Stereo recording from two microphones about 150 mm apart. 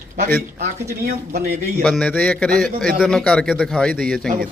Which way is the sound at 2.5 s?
70° right (ahead or behind).